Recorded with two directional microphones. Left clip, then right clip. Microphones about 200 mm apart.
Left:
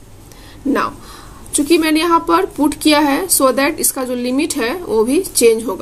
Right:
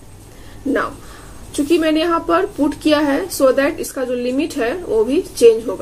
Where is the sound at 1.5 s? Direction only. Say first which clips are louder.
Left 2 dB; 55° left (ahead or behind).